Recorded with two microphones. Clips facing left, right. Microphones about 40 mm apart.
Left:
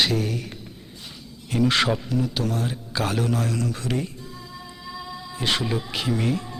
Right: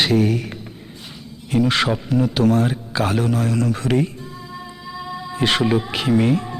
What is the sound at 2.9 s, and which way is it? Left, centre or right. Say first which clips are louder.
Speech: right 3 dB; right.